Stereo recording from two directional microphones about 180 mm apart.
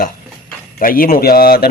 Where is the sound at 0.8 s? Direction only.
50° left (ahead or behind).